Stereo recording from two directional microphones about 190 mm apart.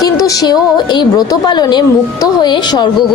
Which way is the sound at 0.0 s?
20° left (ahead or behind).